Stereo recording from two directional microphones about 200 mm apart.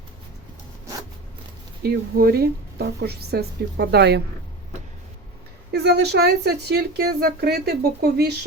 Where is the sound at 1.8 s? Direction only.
50° right (ahead or behind).